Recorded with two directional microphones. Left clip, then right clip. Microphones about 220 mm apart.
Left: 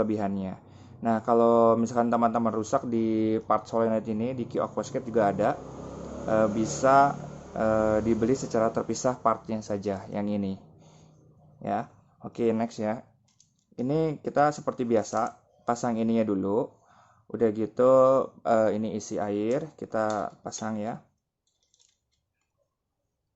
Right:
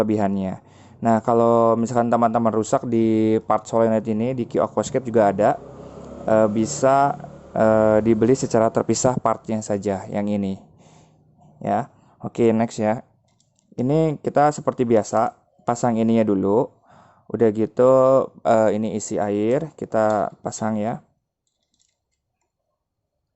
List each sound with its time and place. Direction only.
0.0 s speech: 45° right (ahead or behind)